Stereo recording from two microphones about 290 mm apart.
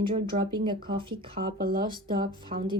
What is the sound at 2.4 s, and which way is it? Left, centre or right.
Speech, centre.